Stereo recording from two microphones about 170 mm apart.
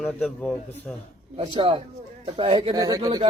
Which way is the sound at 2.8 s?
20° right (ahead or behind).